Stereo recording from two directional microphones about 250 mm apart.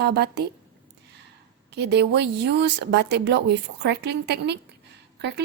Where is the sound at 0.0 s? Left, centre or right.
Right.